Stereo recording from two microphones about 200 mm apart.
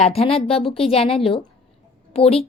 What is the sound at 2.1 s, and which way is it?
Speech, 30° left (ahead or behind).